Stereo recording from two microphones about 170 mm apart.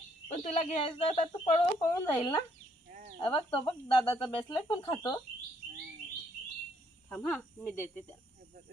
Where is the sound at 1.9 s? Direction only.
20° left (ahead or behind).